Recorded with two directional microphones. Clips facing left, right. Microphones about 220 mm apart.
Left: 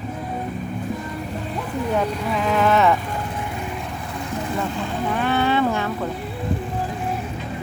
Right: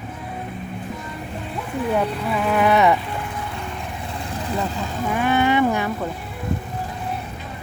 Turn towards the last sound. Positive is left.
turn(degrees=-15)  # may be behind; listen again after turning